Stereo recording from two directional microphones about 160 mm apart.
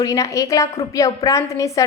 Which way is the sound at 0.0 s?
20° left (ahead or behind).